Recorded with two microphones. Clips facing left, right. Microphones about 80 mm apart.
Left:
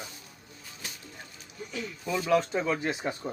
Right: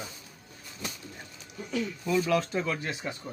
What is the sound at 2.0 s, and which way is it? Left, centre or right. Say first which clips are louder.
Speech: left 1 dB; centre.